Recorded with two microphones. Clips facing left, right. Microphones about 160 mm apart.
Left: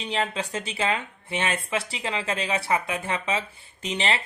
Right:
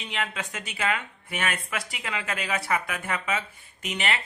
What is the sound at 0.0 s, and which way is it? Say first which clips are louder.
Speech: left 5 dB; 30° left (ahead or behind).